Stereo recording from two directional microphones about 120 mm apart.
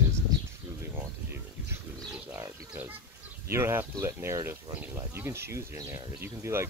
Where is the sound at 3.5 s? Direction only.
20° right (ahead or behind).